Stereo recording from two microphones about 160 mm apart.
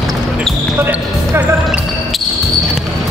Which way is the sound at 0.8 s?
10° right (ahead or behind).